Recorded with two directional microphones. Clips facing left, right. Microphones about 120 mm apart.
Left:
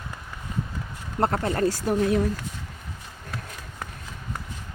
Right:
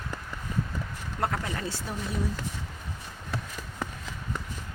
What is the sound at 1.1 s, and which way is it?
Speech, 40° left (ahead or behind).